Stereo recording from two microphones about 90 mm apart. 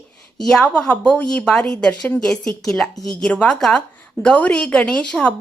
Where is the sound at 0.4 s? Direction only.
10° left (ahead or behind).